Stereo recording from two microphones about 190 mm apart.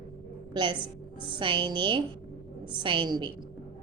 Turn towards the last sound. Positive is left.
turn(degrees=-25)  # may be behind; listen again after turning